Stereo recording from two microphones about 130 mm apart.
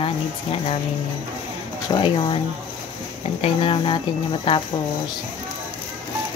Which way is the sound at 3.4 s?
45° left (ahead or behind).